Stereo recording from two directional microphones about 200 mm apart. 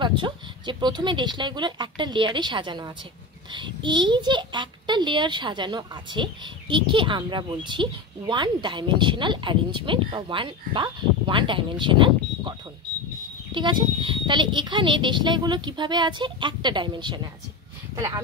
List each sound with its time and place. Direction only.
0.0 s a child's voice: 25° right (ahead or behind)